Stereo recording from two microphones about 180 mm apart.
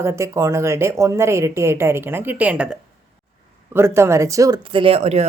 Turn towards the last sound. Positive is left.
turn(degrees=-35)  # may be behind; listen again after turning